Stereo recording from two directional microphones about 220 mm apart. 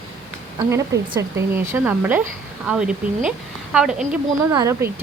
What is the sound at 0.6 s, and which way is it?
A woman's voice, 15° right (ahead or behind).